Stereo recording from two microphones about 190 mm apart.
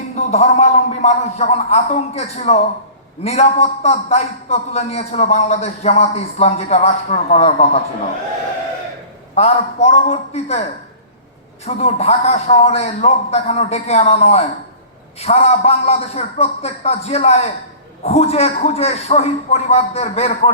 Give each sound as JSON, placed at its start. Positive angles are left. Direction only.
{"t": 0.2, "sound": "a man's voice", "side_deg": 35}
{"t": 9.3, "sound": "a man's voice", "side_deg": 35}